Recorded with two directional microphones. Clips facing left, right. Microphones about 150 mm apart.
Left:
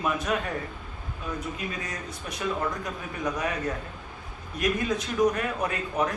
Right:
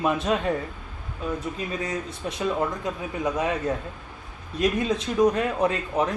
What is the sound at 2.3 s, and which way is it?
Speech, 25° right (ahead or behind).